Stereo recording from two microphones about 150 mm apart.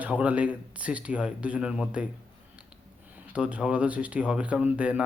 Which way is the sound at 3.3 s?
10° right (ahead or behind).